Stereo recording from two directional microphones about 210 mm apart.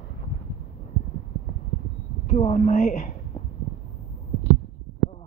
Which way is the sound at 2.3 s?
30° left (ahead or behind).